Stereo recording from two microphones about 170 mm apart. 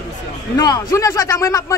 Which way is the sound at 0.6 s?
20° left (ahead or behind).